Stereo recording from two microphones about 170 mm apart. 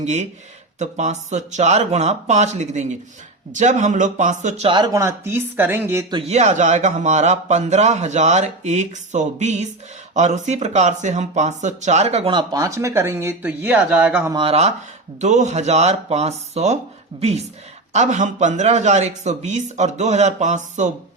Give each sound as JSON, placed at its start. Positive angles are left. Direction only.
{"t": 0.0, "sound": "a man's voice", "side_deg": -45}
{"t": 6.2, "sound": "a man's voice", "side_deg": -40}
{"t": 14.3, "sound": "a man's voice", "side_deg": -35}